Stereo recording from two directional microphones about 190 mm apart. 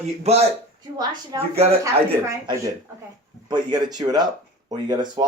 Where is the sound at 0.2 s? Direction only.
35° right (ahead or behind).